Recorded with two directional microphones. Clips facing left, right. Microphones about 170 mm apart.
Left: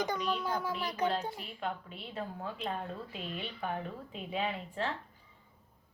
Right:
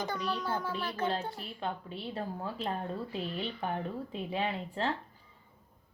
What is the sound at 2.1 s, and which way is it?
Speech, 35° right (ahead or behind).